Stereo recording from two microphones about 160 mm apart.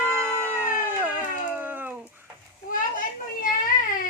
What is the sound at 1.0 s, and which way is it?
Music, 10° right (ahead or behind).